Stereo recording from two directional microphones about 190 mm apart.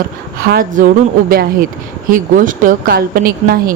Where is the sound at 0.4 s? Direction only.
50° right (ahead or behind).